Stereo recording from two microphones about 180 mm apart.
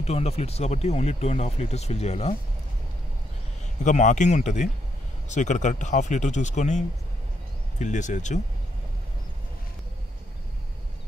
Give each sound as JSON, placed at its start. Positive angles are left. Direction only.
{"t": 0.0, "sound": "speech", "side_deg": 35}
{"t": 3.8, "sound": "speech", "side_deg": 45}
{"t": 7.8, "sound": "speech", "side_deg": 40}